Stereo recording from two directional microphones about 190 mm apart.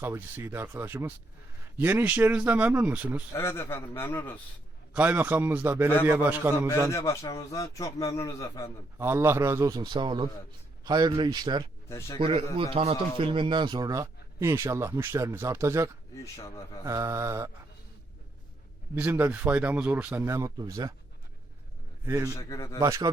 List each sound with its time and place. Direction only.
0.0 s speech: 10° right (ahead or behind)
3.3 s a man's voice: 10° left (ahead or behind)
4.9 s speech: 10° right (ahead or behind)
6.9 s a man's voice: 15° left (ahead or behind)
9.0 s speech: 10° right (ahead or behind)
11.9 s a man's voice: 15° left (ahead or behind)
12.2 s speech: 30° right (ahead or behind)
16.1 s a man's voice: 15° left (ahead or behind)
16.8 s speech: 15° right (ahead or behind)
18.9 s speech: 10° right (ahead or behind)
22.0 s a man's voice: 15° right (ahead or behind)
22.4 s a man's voice: 15° left (ahead or behind)
22.8 s speech: 20° right (ahead or behind)